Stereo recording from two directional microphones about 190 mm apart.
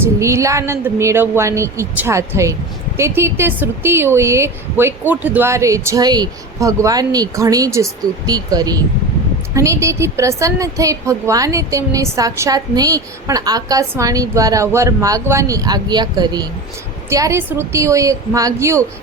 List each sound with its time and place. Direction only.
0.0 s a woman's voice: 15° right (ahead or behind)